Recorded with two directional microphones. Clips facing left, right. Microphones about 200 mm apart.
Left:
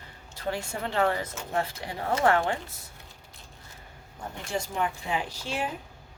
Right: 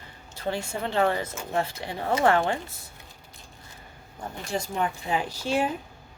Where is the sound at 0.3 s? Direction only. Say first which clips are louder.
Right 2 dB; 25° right (ahead or behind).